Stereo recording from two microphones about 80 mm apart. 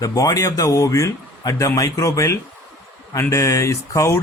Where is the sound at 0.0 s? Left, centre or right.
Left.